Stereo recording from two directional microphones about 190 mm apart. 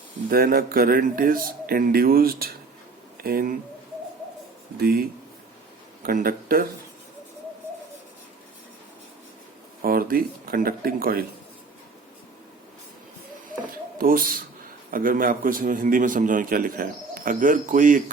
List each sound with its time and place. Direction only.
0.3 s a man's voice: 50° right (ahead or behind)
4.8 s a man's voice: 55° right (ahead or behind)
9.8 s a man's voice: 50° right (ahead or behind)
14.0 s a man's voice: 50° right (ahead or behind)